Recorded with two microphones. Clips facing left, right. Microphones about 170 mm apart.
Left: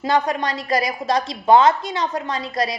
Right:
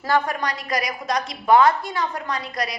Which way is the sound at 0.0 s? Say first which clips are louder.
Left 2 dB; 20° left (ahead or behind).